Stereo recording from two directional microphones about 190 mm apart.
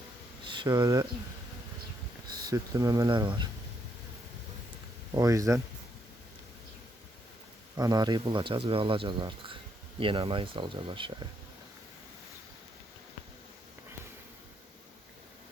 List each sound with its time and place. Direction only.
0.4 s speech: 25° right (ahead or behind)
2.4 s speech: 15° right (ahead or behind)
5.1 s speech: 15° right (ahead or behind)
7.8 s speech: 20° right (ahead or behind)